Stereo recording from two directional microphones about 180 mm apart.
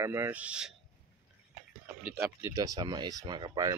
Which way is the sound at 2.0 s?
10° right (ahead or behind).